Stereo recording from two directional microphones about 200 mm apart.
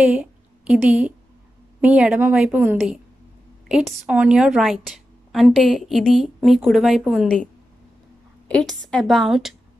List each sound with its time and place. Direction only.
0.0 s a woman's voice: 5° right (ahead or behind)
8.5 s a woman's voice: 5° left (ahead or behind)